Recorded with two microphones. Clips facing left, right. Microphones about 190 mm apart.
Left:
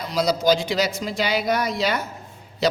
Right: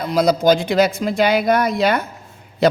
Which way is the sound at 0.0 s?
55° right (ahead or behind).